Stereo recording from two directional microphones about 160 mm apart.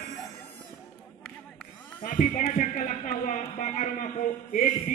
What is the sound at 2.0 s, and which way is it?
Speech, 60° left (ahead or behind).